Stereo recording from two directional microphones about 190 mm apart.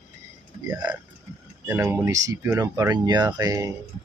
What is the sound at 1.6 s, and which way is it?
Speech, 10° right (ahead or behind).